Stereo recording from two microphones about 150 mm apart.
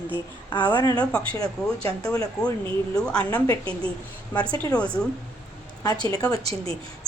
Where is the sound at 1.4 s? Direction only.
40° right (ahead or behind).